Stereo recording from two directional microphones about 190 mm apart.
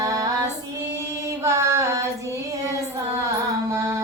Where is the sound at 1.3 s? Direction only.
15° right (ahead or behind).